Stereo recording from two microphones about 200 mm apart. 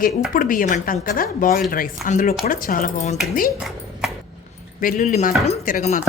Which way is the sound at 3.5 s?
Centre (ahead or behind).